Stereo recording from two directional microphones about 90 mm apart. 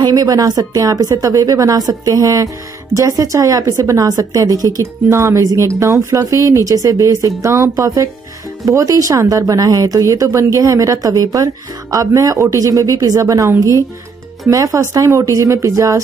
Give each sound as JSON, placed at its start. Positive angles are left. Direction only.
{"t": 0.0, "sound": "a woman's voice", "side_deg": -45}
{"t": 14.5, "sound": "speech", "side_deg": -40}